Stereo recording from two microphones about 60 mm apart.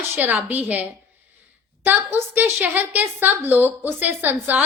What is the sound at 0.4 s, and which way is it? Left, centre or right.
A woman's voice, right.